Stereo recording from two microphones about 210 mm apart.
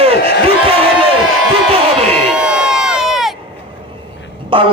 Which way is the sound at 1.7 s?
30° right (ahead or behind).